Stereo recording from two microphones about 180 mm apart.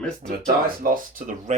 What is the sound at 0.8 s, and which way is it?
Speech, 50° right (ahead or behind).